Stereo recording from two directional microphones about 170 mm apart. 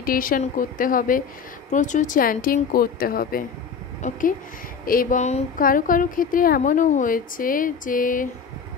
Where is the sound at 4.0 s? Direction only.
50° left (ahead or behind).